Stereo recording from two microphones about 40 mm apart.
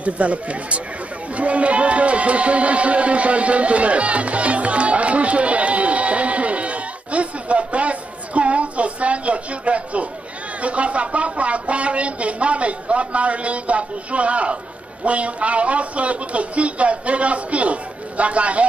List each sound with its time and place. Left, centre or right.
0.0 s speech: right